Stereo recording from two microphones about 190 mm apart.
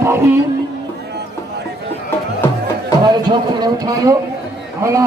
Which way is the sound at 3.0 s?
25° right (ahead or behind).